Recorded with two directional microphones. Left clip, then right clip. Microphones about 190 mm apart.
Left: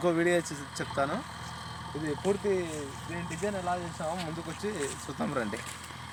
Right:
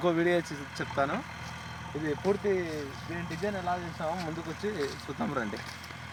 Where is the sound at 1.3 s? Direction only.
25° right (ahead or behind).